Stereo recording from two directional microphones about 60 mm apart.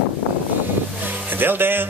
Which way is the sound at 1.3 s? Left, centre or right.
Right.